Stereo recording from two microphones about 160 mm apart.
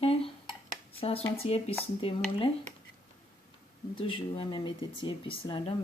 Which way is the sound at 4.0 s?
35° left (ahead or behind).